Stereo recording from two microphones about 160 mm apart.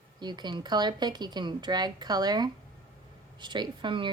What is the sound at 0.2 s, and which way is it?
Speech, 25° right (ahead or behind).